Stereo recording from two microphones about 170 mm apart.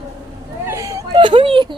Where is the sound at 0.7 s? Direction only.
15° right (ahead or behind).